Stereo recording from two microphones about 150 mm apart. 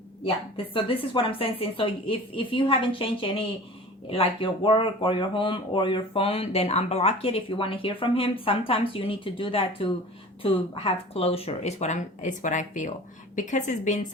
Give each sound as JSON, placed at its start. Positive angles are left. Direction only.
{"t": 0.5, "sound": "a woman's voice", "side_deg": 35}